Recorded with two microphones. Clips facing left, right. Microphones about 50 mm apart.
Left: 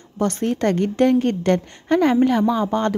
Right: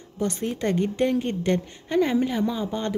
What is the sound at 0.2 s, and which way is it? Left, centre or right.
A woman's voice, left.